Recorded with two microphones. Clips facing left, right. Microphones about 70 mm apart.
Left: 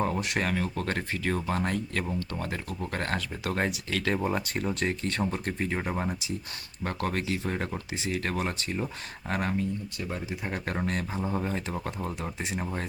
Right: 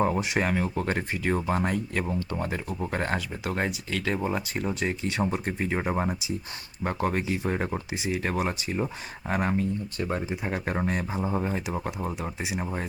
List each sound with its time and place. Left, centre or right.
0.0 s speech: centre
9.6 s speech: right
10.4 s speech: centre